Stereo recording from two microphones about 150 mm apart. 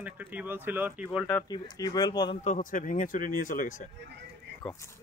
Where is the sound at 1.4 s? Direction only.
25° left (ahead or behind).